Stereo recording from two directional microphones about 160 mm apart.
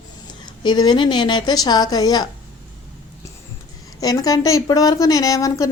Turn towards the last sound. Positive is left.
turn(degrees=20)  # may be behind; listen again after turning